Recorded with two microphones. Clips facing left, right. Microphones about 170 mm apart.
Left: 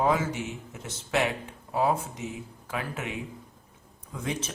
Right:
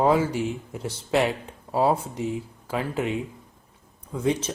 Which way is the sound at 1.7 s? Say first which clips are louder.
Right 4 dB; 30° right (ahead or behind).